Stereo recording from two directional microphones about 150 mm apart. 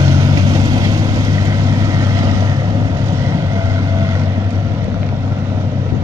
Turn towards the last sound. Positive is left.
turn(degrees=-20)  # may be behind; listen again after turning